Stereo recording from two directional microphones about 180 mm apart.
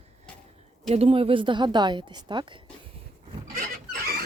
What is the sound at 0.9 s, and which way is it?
Speech, 35° right (ahead or behind).